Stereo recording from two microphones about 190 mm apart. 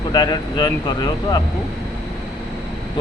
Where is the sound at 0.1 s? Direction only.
20° left (ahead or behind).